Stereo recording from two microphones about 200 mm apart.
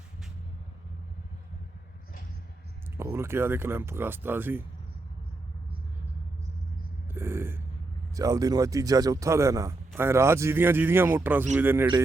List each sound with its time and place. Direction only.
3.0 s a man's voice: 10° right (ahead or behind)
7.1 s a sound: 10° right (ahead or behind)
8.1 s a man's voice: 15° right (ahead or behind)